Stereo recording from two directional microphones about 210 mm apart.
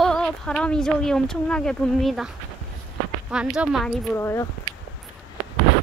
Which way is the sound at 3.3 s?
5° right (ahead or behind).